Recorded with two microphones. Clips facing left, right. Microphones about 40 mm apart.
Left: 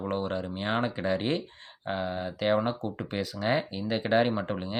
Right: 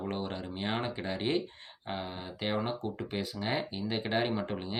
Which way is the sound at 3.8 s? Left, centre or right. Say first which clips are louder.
Left 4 dB; left.